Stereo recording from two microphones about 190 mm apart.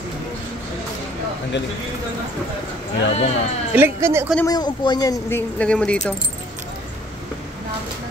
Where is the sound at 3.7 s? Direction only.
10° right (ahead or behind).